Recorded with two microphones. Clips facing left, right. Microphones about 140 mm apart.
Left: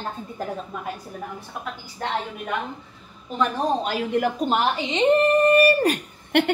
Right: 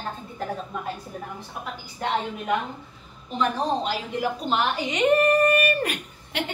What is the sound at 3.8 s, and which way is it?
Speech, 50° left (ahead or behind).